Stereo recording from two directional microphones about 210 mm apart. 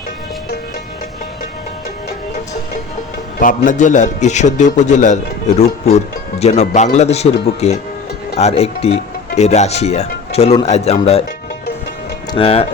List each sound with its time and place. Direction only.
3.4 s a man's voice: 35° left (ahead or behind)
6.4 s a man's voice: 30° left (ahead or behind)
12.3 s speech: 25° left (ahead or behind)